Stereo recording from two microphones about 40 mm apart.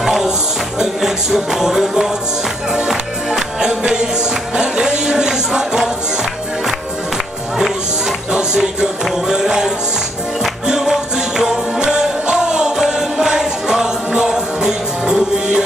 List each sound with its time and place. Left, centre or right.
0.0 s music: centre
8.3 s music: centre